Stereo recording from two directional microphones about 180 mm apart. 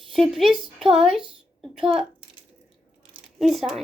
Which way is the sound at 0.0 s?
Centre (ahead or behind).